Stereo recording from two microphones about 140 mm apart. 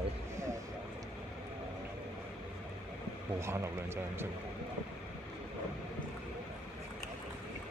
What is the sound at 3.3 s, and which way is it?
Speech, 20° right (ahead or behind).